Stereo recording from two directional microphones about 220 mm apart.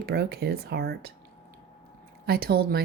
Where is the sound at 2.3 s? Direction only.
45° right (ahead or behind).